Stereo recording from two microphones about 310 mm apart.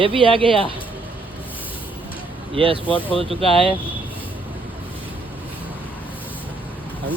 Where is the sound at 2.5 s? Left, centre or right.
Centre.